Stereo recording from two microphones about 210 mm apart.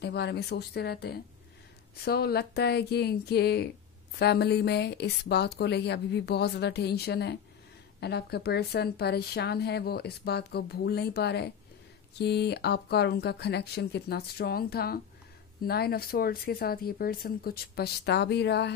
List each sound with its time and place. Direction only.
0.0 s speech: 50° left (ahead or behind)